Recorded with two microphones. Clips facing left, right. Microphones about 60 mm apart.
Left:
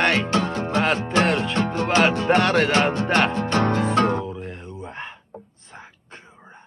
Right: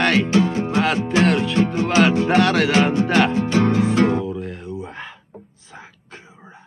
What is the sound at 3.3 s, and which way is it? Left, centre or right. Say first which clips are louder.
Music: right 3 dB; left.